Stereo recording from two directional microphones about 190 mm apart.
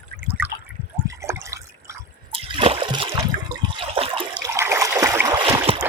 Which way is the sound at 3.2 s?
20° right (ahead or behind).